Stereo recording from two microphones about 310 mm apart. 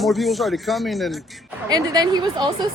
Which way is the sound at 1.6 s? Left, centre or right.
Centre.